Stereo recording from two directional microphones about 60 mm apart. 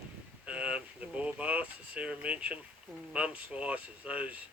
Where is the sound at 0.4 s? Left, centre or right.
Centre.